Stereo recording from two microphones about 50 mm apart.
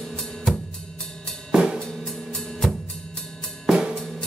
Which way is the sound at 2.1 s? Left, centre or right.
Centre.